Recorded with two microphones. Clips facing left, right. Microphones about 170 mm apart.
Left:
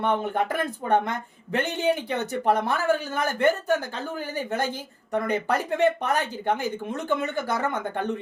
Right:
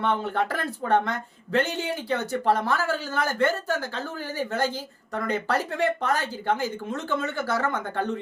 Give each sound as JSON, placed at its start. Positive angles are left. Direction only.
{"t": 0.0, "sound": "speech", "side_deg": 15}